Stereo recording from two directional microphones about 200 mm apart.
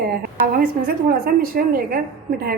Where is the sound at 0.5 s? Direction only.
50° right (ahead or behind).